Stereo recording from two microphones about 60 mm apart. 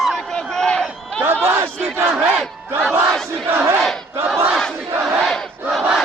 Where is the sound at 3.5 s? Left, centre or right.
Right.